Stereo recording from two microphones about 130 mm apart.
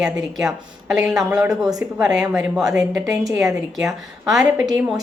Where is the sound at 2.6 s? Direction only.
25° right (ahead or behind).